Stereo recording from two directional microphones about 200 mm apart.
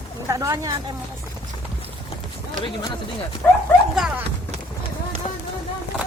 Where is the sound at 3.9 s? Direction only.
Centre (ahead or behind).